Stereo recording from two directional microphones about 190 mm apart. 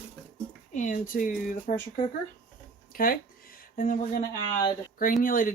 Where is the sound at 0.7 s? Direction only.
40° left (ahead or behind).